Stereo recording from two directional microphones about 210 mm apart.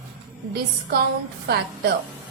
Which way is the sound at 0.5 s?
50° right (ahead or behind).